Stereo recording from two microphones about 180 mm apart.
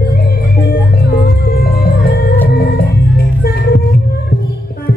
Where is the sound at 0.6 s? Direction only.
60° left (ahead or behind).